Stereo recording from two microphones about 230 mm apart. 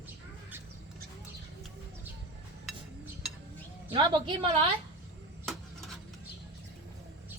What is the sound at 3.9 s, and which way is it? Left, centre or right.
Speech, centre.